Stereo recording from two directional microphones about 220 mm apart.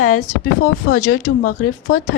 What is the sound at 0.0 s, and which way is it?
Speech, 80° left.